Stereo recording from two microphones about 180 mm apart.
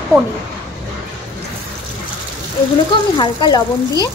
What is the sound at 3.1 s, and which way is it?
Speech, 25° left (ahead or behind).